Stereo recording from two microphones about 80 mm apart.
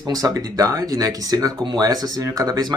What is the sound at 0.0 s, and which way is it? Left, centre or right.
Speech, right.